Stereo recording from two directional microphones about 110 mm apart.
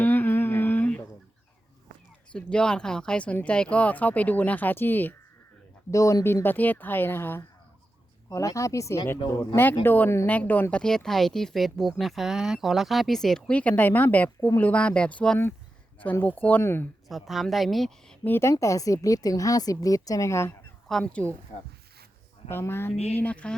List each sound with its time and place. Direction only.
0.0 s a sound: 15° left (ahead or behind)
2.3 s speech: 10° left (ahead or behind)
5.9 s a woman's voice: 30° left (ahead or behind)
17.1 s speech: centre (ahead or behind)
18.2 s a woman's voice: 25° left (ahead or behind)
21.0 s speech: 15° left (ahead or behind)
22.4 s a woman's voice: 20° left (ahead or behind)